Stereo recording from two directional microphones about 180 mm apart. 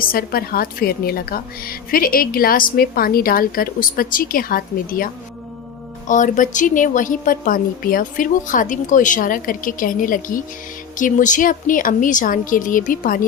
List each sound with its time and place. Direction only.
0.0 s a woman's voice: 55° left (ahead or behind)
6.1 s a woman's voice: 45° left (ahead or behind)